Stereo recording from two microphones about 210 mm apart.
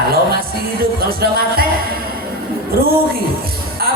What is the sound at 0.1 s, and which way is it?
Music, 45° right (ahead or behind).